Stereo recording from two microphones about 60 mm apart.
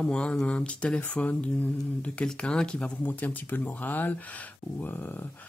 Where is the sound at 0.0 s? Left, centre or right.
Centre.